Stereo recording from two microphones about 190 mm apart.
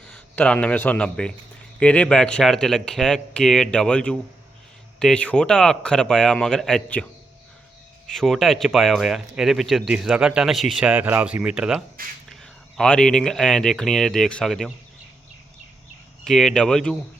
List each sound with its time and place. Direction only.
0.1 s a man's voice: 5° left (ahead or behind)
12.0 s speech: 50° right (ahead or behind)
12.3 s speech: 5° left (ahead or behind)
16.2 s speech: centre (ahead or behind)